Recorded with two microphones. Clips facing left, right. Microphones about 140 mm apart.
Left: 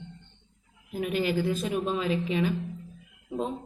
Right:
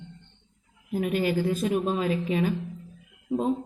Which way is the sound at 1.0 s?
45° right (ahead or behind).